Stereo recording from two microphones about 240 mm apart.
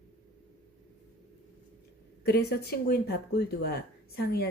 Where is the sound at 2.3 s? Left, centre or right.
Left.